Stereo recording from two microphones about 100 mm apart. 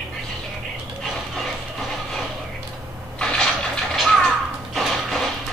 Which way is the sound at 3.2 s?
5° left (ahead or behind).